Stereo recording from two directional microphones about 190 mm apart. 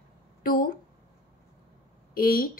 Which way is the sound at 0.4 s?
50° left (ahead or behind).